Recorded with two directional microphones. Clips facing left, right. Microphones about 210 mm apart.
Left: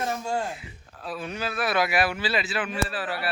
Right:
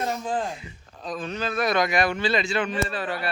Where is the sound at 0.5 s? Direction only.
5° left (ahead or behind).